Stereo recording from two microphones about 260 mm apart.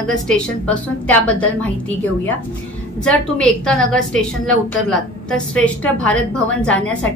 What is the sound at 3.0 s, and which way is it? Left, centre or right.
A woman's voice, centre.